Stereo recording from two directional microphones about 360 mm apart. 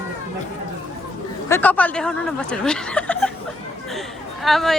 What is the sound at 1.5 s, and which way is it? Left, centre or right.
A woman's voice, centre.